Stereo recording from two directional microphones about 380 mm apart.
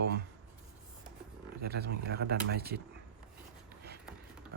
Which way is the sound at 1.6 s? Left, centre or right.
Right.